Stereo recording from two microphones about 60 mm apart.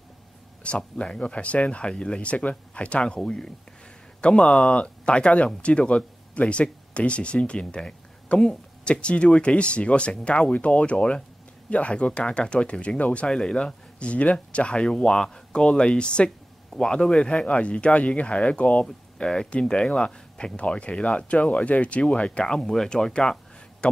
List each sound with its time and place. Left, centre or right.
0.7 s speech: centre